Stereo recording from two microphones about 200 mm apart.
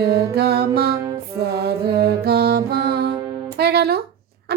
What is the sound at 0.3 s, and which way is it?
Speech, 55° right (ahead or behind).